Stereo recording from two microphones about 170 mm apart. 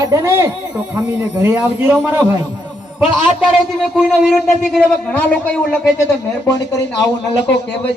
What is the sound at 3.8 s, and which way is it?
A man's voice, centre (ahead or behind).